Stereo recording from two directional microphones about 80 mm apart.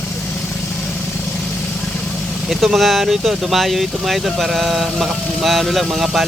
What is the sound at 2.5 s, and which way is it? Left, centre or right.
Speech, centre.